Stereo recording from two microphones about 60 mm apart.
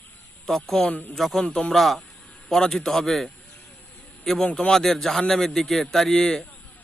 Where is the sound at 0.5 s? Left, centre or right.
Centre.